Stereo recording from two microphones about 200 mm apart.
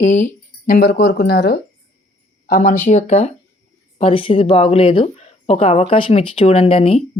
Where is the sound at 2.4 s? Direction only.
40° left (ahead or behind).